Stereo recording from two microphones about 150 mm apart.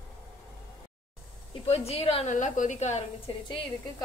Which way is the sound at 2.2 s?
55° left (ahead or behind).